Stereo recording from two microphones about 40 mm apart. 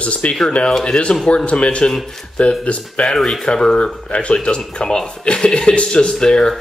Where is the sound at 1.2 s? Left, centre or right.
Left.